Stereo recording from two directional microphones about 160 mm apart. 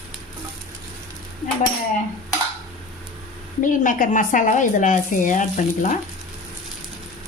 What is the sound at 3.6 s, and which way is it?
A woman's voice, 55° left (ahead or behind).